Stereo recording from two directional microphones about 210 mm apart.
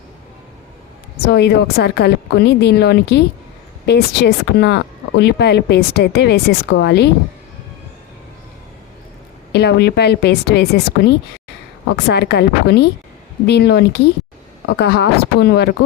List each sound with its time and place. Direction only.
1.3 s a woman's voice: 50° left (ahead or behind)
9.5 s a woman's voice: 50° left (ahead or behind)